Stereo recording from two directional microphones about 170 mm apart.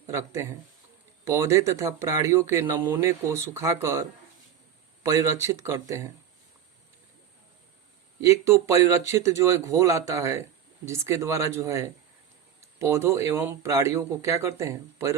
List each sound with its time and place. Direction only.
1.2 s speech: 15° right (ahead or behind)
5.0 s speech: 15° right (ahead or behind)
8.2 s speech: 20° right (ahead or behind)